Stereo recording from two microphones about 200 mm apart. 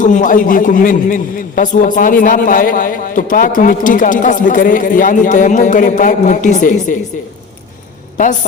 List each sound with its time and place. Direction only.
0.0 s a man's voice: 40° left (ahead or behind)